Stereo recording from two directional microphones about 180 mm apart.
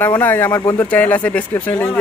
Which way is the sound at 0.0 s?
10° left (ahead or behind).